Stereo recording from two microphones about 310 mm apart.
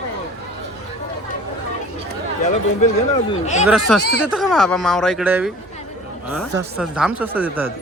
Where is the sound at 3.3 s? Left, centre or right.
Left.